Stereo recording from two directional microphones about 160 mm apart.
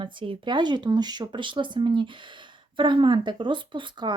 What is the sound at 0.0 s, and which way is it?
Speech, 30° right (ahead or behind).